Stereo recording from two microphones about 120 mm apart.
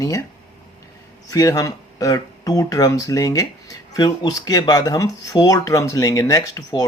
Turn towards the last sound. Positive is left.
turn(degrees=30)  # may be behind; listen again after turning